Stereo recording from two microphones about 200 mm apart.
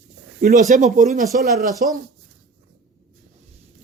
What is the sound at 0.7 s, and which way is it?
Speech, 40° right (ahead or behind).